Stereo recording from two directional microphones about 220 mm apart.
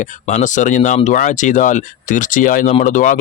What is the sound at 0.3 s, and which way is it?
Speech, 35° left (ahead or behind).